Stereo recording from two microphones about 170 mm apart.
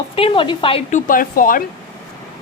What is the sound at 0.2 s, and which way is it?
A woman's voice, 30° left (ahead or behind).